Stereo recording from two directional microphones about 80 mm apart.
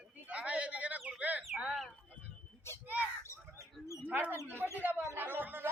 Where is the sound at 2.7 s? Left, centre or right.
Left.